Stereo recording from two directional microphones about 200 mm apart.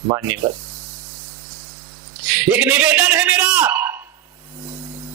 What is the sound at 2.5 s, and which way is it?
Speech, 10° right (ahead or behind).